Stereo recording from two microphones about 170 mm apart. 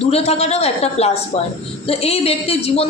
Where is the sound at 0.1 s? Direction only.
40° left (ahead or behind).